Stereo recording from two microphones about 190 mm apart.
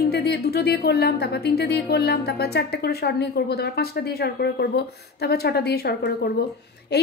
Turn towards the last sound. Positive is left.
turn(degrees=60)  # may be behind; listen again after turning